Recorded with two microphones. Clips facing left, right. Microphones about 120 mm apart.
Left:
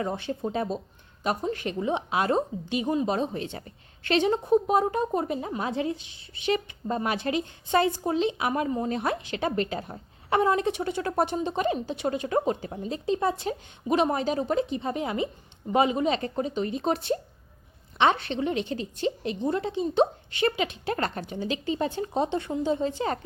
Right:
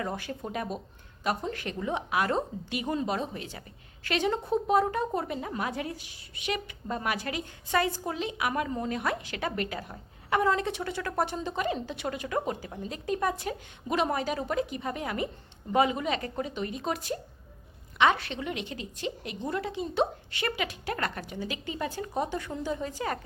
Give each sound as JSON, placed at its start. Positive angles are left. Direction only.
{"t": 0.0, "sound": "a woman's voice", "side_deg": 25}